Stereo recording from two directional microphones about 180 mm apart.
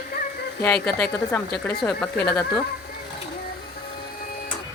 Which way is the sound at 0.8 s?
5° left (ahead or behind).